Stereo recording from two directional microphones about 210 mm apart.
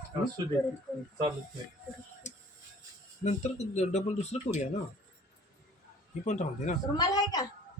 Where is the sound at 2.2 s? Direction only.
35° left (ahead or behind).